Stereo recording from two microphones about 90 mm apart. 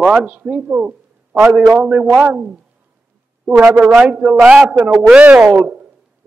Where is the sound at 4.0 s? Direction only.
10° right (ahead or behind).